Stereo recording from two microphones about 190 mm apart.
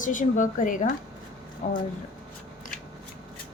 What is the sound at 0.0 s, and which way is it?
A woman's voice, 45° left (ahead or behind).